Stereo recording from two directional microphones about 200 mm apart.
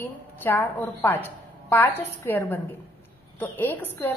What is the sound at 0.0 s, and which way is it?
A woman's voice, 10° left (ahead or behind).